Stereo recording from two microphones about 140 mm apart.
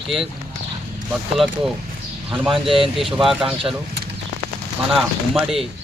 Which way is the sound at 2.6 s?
40° right (ahead or behind).